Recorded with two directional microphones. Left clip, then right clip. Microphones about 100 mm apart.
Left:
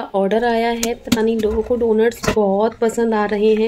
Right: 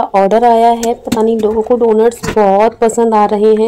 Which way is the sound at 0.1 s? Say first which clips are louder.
Right 8 dB; 55° right (ahead or behind).